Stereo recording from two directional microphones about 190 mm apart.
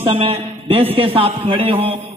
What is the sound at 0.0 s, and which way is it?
A man's voice, 25° right (ahead or behind).